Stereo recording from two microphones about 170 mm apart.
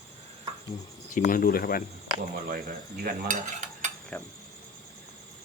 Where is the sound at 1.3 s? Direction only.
60° left (ahead or behind).